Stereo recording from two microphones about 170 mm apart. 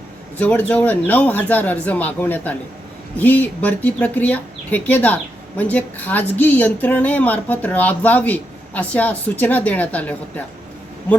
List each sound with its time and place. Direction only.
0.3 s speech: 10° left (ahead or behind)